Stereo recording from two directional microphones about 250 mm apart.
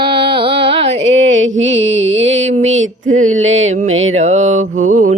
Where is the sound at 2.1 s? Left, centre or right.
Right.